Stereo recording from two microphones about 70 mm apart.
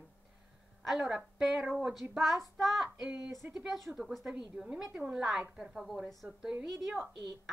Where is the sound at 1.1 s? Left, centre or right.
Centre.